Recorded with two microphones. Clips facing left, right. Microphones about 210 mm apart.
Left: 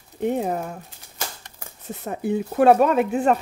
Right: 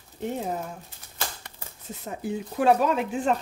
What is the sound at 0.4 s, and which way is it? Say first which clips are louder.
Speech: left 5 dB; 60° left (ahead or behind).